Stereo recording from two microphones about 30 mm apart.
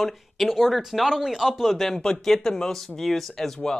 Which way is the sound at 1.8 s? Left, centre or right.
Centre.